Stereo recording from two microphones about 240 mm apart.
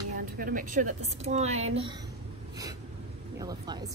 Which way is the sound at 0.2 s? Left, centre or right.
Right.